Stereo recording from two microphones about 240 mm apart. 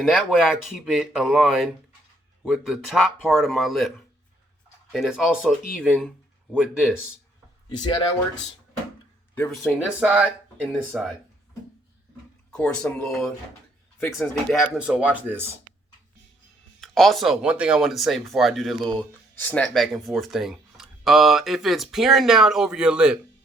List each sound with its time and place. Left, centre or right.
0.0 s speech: centre
7.8 s speech: centre
9.3 s speech: centre
9.7 s speech: centre
12.5 s speech: centre
16.8 s speech: centre